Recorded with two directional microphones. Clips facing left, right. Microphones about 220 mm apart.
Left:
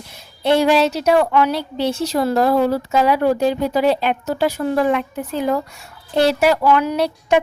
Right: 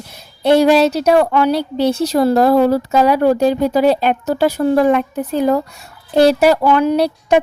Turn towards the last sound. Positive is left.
turn(degrees=-35)  # may be behind; listen again after turning